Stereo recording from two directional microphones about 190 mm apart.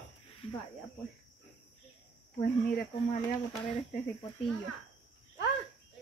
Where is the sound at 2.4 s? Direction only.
45° left (ahead or behind).